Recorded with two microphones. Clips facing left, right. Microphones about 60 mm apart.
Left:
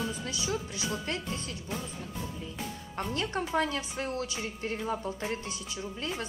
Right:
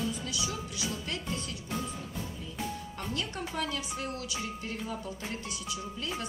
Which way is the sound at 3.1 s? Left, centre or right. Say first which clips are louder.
Left 6 dB; left.